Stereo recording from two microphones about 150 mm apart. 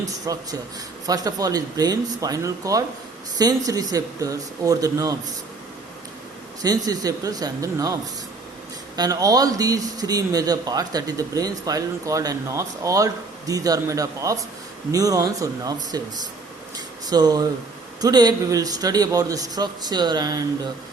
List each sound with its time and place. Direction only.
0.3 s speech: 20° right (ahead or behind)
6.6 s speech: 25° right (ahead or behind)
9.0 s speech: 25° right (ahead or behind)